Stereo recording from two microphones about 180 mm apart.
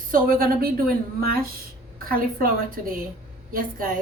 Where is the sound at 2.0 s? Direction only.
55° right (ahead or behind).